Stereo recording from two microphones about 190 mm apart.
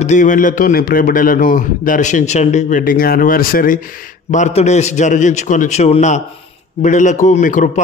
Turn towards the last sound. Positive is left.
turn(degrees=45)  # may be behind; listen again after turning